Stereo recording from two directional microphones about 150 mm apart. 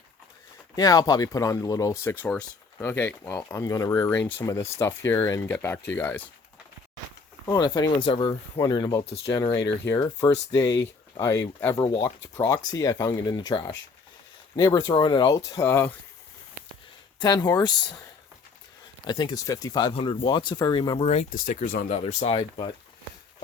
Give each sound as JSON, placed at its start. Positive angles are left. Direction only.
{"t": 0.8, "sound": "speech", "side_deg": 25}
{"t": 7.4, "sound": "speech", "side_deg": 25}
{"t": 15.4, "sound": "speech", "side_deg": 20}
{"t": 17.2, "sound": "speech", "side_deg": 30}
{"t": 19.0, "sound": "speech", "side_deg": 30}
{"t": 19.9, "sound": "speech", "side_deg": 35}
{"t": 21.0, "sound": "speech", "side_deg": 45}
{"t": 21.4, "sound": "speech", "side_deg": 65}
{"t": 21.9, "sound": "speech", "side_deg": 40}